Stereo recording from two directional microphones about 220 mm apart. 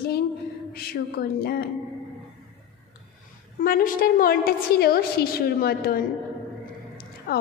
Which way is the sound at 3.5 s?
40° left (ahead or behind).